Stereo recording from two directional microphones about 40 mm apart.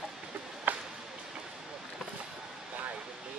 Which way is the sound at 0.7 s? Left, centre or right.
Right.